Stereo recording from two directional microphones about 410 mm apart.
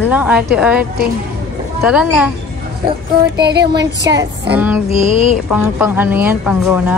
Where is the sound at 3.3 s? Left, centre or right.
Right.